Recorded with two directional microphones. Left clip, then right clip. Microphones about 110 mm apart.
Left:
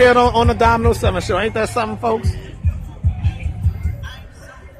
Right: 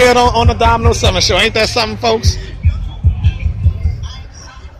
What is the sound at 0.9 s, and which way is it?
Speech, 35° left (ahead or behind).